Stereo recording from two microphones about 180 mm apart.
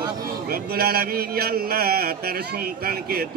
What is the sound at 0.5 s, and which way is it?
Speech, 60° right (ahead or behind).